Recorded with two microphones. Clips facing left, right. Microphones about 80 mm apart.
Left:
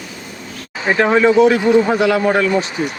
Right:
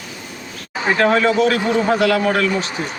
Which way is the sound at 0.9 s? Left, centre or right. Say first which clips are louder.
Left 4 dB; centre.